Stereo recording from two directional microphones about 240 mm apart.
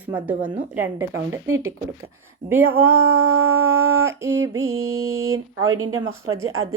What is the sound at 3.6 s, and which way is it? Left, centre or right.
Speech, right.